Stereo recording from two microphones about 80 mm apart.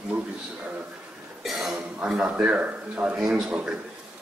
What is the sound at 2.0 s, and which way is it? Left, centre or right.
Speech, centre.